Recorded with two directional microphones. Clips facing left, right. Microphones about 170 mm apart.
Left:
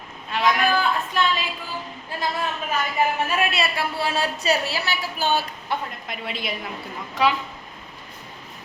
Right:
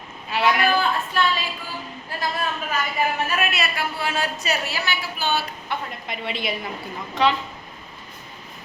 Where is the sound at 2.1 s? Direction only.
20° left (ahead or behind).